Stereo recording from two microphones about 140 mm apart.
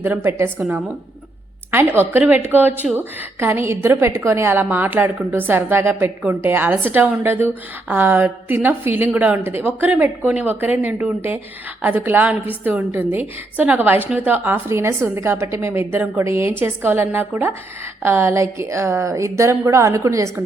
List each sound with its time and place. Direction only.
0.0 s a woman's voice: 15° right (ahead or behind)
1.7 s a woman's voice: 15° right (ahead or behind)